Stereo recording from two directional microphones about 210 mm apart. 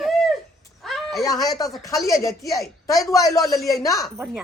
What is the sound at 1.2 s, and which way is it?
Speech, 15° left (ahead or behind).